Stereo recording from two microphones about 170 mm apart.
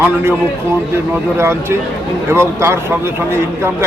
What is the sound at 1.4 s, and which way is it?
A man's voice, 15° right (ahead or behind).